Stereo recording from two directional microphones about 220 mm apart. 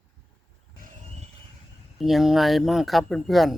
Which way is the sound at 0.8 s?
30° right (ahead or behind).